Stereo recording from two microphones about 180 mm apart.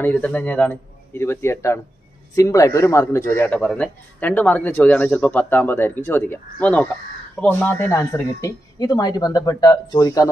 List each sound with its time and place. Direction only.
0.0 s a man's voice: 10° left (ahead or behind)